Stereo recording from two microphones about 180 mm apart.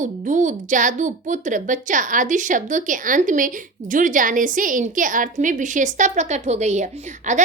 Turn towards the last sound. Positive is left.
turn(degrees=-40)  # may be behind; listen again after turning